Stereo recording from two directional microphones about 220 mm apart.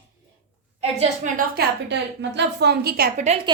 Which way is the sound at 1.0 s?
40° right (ahead or behind).